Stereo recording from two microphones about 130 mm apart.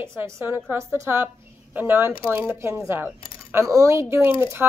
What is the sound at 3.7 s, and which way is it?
Speech, 20° right (ahead or behind).